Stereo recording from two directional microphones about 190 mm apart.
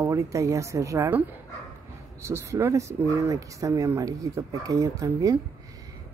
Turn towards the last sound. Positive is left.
turn(degrees=-20)  # may be behind; listen again after turning